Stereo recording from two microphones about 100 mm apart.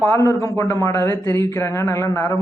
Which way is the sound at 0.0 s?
30° left (ahead or behind).